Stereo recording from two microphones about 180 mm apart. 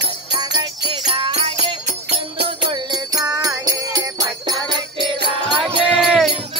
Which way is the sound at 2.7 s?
20° right (ahead or behind).